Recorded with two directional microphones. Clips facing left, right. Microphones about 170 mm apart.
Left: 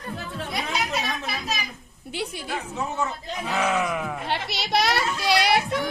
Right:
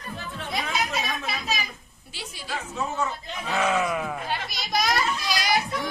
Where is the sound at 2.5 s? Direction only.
20° left (ahead or behind).